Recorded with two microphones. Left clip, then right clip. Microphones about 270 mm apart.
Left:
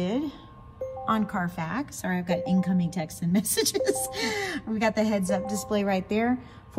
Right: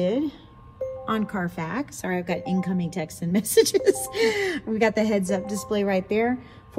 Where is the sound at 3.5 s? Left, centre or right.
Centre.